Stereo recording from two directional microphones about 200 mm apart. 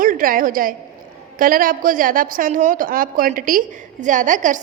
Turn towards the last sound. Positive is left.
turn(degrees=-40)  # may be behind; listen again after turning